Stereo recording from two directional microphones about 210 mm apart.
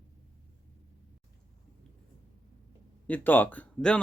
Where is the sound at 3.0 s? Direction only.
10° left (ahead or behind).